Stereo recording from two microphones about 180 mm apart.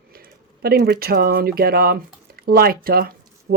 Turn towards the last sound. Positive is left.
turn(degrees=-60)  # may be behind; listen again after turning